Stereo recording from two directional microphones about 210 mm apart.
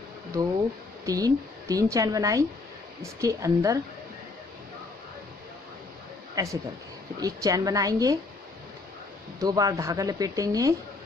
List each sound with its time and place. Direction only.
1.0 s speech: 15° right (ahead or behind)
6.3 s speech: 15° right (ahead or behind)
9.4 s speech: 15° right (ahead or behind)